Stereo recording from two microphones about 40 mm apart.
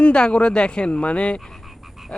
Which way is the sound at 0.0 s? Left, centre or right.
Left.